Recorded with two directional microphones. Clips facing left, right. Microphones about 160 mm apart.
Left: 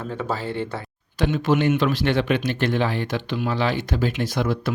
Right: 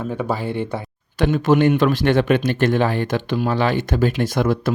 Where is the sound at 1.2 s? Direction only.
45° right (ahead or behind).